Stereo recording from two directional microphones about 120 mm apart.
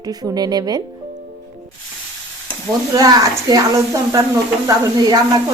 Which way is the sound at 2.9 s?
30° right (ahead or behind).